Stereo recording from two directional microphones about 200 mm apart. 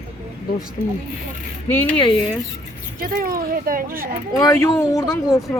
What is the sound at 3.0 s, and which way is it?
Speech, 45° right (ahead or behind).